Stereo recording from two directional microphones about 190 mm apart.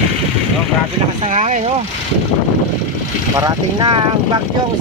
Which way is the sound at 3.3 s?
20° right (ahead or behind).